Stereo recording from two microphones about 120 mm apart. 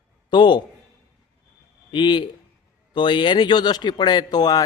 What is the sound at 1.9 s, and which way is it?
Speech, 40° left (ahead or behind).